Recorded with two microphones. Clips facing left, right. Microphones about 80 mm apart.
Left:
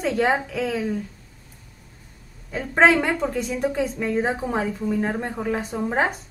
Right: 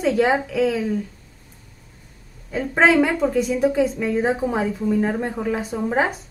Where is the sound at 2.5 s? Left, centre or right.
Centre.